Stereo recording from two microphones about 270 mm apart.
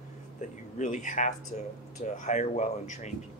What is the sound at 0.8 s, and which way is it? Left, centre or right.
Speech, left.